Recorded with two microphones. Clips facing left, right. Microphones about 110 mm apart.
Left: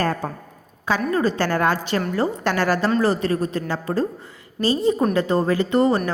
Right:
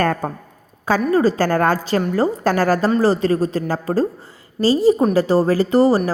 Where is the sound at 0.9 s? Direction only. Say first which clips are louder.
Right 5 dB; 40° right (ahead or behind).